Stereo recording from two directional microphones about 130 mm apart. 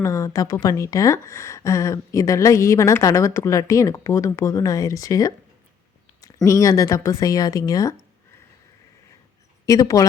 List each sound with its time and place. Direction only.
0.0 s a woman's voice: 25° left (ahead or behind)
9.6 s a woman's voice: 25° left (ahead or behind)